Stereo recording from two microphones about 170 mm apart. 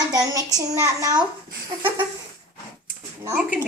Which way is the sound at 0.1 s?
20° right (ahead or behind).